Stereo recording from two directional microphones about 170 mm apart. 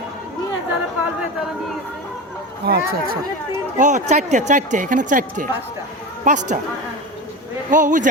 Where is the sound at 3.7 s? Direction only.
45° right (ahead or behind).